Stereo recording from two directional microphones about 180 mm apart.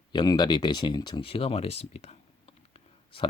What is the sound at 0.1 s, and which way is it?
Speech, 25° left (ahead or behind).